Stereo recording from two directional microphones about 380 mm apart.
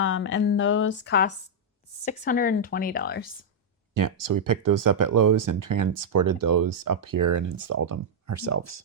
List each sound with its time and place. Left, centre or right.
0.0 s speech: left
3.9 s speech: right